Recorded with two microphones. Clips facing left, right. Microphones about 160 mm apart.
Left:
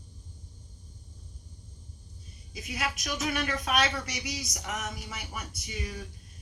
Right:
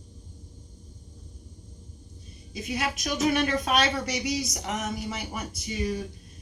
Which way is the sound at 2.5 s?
30° right (ahead or behind).